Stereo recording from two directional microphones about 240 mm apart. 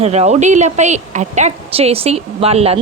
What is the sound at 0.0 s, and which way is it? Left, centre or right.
A woman's voice, right.